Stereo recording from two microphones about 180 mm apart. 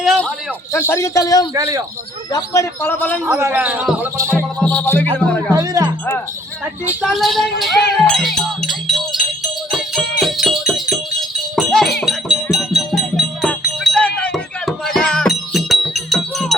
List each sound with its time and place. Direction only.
0.0 s a sound: centre (ahead or behind)
0.7 s speech: 15° left (ahead or behind)
1.5 s speech: 20° right (ahead or behind)
2.3 s speech: 15° left (ahead or behind)
3.2 s speech: 15° right (ahead or behind)
4.6 s speech: 10° left (ahead or behind)
5.5 s speech: 20° right (ahead or behind)
6.8 s speech: 5° right (ahead or behind)
8.0 s music: centre (ahead or behind)